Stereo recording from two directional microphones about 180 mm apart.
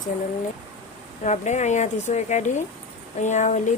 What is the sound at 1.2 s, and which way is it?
Speech, 40° left (ahead or behind).